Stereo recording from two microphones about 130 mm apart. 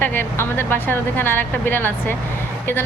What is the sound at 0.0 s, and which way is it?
A woman's voice, 15° left (ahead or behind).